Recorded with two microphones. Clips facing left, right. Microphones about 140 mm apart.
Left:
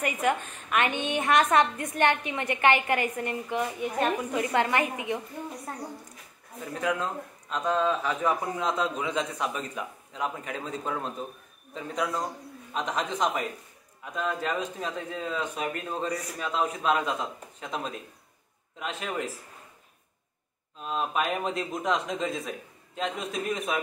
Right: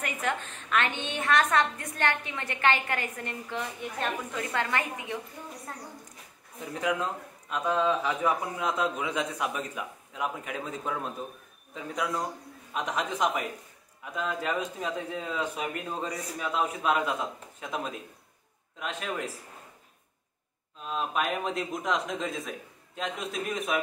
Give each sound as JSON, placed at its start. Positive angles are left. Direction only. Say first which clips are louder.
{"t": 0.0, "sound": "a woman's voice", "louder": "left 5 dB", "side_deg": 15}
{"t": 6.8, "sound": "a man's voice", "louder": "even", "side_deg": -15}
{"t": 20.9, "sound": "a man's voice", "louder": "left 1 dB", "side_deg": 0}